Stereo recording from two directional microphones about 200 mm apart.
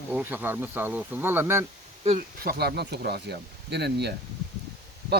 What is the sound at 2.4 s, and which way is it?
Speech, 55° right (ahead or behind).